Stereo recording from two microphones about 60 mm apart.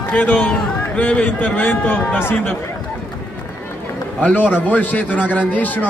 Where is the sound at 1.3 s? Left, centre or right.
Left.